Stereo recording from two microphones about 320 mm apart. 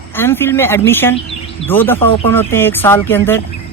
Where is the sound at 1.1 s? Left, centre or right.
Centre.